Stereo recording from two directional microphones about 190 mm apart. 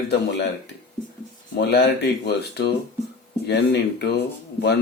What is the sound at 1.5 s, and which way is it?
Speech, 60° left (ahead or behind).